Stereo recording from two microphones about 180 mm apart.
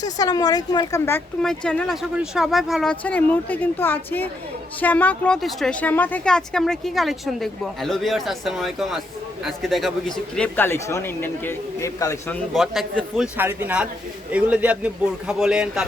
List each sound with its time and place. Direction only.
0.0 s a woman's voice: 20° left (ahead or behind)
1.4 s speech: 5° left (ahead or behind)
12.5 s a man's voice: centre (ahead or behind)